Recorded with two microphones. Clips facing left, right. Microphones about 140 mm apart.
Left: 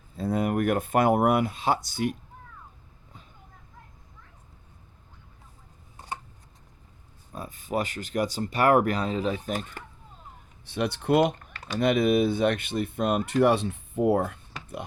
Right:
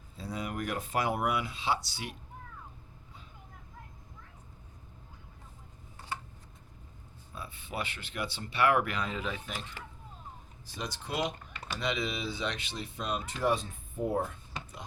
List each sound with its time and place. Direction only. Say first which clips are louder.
0.2 s speech: left 11 dB; 55° left (ahead or behind)
7.3 s speech: left 9 dB; 45° left (ahead or behind)
10.7 s speech: left 14 dB; 65° left (ahead or behind)